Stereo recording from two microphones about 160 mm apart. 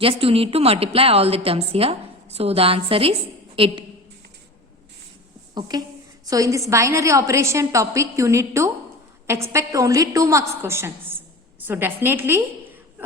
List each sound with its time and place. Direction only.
0.0 s a woman's voice: 35° right (ahead or behind)
5.5 s a woman's voice: 25° right (ahead or behind)